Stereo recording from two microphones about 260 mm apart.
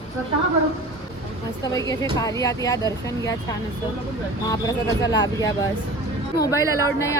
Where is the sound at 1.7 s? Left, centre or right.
Centre.